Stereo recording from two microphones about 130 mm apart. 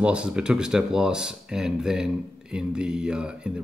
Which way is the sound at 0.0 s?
10° right (ahead or behind).